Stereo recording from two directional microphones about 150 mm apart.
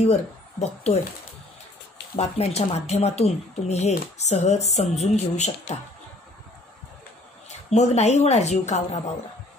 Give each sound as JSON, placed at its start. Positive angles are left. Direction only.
{"t": 0.0, "sound": "speech", "side_deg": 45}
{"t": 2.1, "sound": "speech", "side_deg": 45}
{"t": 7.4, "sound": "speech", "side_deg": 50}